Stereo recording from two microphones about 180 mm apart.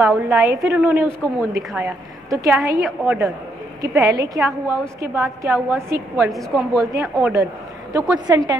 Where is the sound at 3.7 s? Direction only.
20° right (ahead or behind).